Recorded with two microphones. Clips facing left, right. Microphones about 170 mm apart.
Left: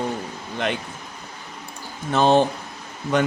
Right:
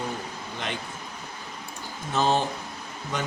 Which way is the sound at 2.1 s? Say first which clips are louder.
Left 7 dB; 65° left (ahead or behind).